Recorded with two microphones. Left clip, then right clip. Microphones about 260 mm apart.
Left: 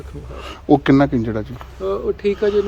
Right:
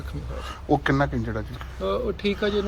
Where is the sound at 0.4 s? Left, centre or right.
Left.